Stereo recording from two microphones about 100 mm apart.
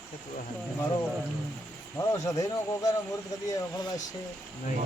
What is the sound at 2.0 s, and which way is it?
Speech, 35° left (ahead or behind).